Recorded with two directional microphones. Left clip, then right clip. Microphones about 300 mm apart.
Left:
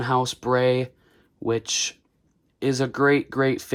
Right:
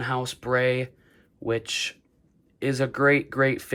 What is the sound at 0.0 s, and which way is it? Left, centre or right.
Speech, centre.